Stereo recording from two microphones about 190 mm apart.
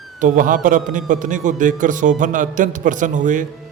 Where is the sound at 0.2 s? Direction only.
45° right (ahead or behind).